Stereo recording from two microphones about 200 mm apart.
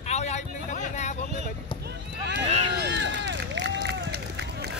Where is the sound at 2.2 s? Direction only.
60° right (ahead or behind).